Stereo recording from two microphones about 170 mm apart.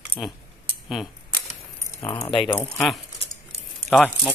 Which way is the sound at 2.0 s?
20° left (ahead or behind).